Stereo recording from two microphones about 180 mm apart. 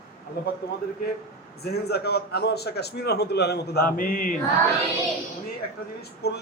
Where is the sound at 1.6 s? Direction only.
60° left (ahead or behind).